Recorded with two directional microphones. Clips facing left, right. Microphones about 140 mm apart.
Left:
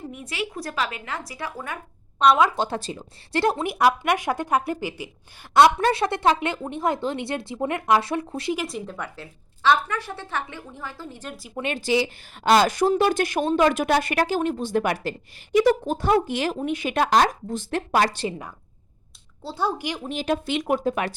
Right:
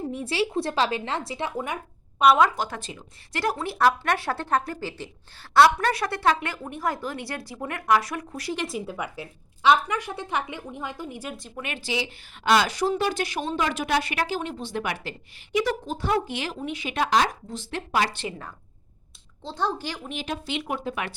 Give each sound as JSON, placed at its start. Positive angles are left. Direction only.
{"t": 0.1, "sound": "speech", "side_deg": -30}
{"t": 2.1, "sound": "speech", "side_deg": -5}
{"t": 2.6, "sound": "speech", "side_deg": 30}
{"t": 8.5, "sound": "a woman's voice", "side_deg": 0}
{"t": 11.5, "sound": "speech", "side_deg": 30}
{"t": 11.8, "sound": "speech", "side_deg": 45}
{"t": 19.4, "sound": "speech", "side_deg": 10}
{"t": 20.1, "sound": "speech", "side_deg": 40}
{"t": 20.3, "sound": "speech", "side_deg": 50}